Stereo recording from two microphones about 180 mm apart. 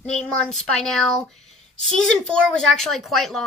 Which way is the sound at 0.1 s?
5° left (ahead or behind).